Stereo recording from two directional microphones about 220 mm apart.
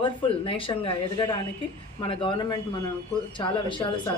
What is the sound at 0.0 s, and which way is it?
Speech, 25° left (ahead or behind).